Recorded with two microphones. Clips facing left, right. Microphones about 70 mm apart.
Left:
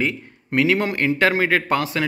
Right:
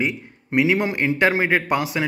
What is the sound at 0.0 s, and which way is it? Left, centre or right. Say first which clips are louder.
A man's voice: left 1 dB; centre.